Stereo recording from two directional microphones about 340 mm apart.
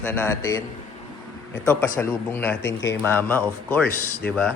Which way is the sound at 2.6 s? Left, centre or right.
Left.